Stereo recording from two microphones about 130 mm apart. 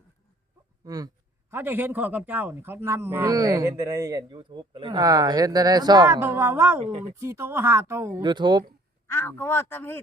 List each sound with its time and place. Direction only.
0.9 s hiccup: 30° right (ahead or behind)
1.5 s a man's voice: 15° right (ahead or behind); by 6.1 s 30° right (ahead or behind)
6.1 s a man's voice: 20° right (ahead or behind)
6.8 s speech: 55° right (ahead or behind)
7.2 s a man's voice: 20° right (ahead or behind)
8.2 s speech: 35° right (ahead or behind)
9.0 s speech: 20° left (ahead or behind)